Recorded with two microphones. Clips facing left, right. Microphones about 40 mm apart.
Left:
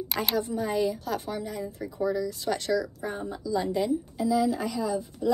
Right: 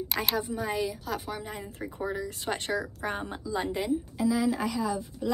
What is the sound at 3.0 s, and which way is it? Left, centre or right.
Speech, right.